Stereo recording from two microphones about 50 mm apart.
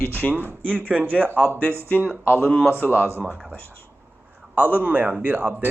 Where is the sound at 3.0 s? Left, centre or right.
Right.